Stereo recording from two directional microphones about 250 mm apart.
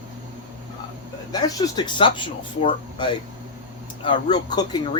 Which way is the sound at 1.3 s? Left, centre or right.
Centre.